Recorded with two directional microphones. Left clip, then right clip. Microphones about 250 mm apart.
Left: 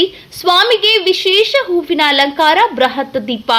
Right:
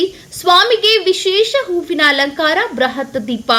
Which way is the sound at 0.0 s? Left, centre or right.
Centre.